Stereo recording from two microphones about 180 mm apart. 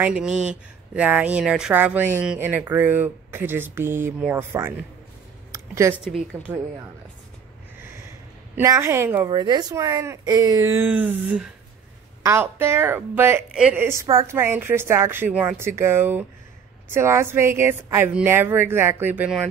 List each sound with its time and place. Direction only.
0.0 s speech: 5° right (ahead or behind)
5.5 s a sound: 15° right (ahead or behind)
6.0 s speech: 5° right (ahead or behind)
8.5 s speech: 15° right (ahead or behind)